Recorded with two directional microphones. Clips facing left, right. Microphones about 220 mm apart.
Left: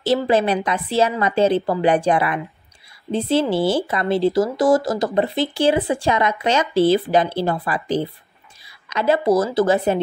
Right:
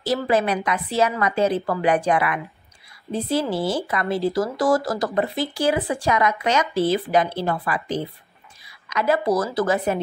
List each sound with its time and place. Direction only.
0.0 s a woman's voice: 25° left (ahead or behind)